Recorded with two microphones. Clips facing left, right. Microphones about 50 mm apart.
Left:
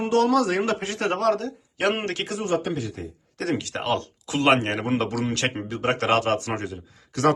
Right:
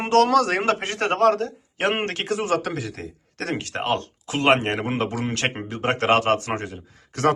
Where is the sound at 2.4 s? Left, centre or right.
Right.